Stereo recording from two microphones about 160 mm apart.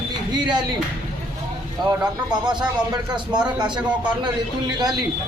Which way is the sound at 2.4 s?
30° right (ahead or behind).